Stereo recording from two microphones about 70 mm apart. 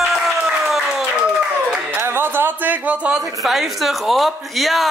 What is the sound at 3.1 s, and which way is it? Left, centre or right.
A woman's voice, centre.